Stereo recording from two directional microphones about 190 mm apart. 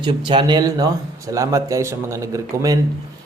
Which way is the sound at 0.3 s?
25° right (ahead or behind).